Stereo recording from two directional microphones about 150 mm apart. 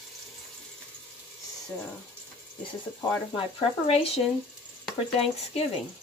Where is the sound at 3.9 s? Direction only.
40° left (ahead or behind).